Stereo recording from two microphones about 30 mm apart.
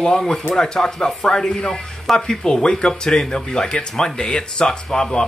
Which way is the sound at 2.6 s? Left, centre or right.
Left.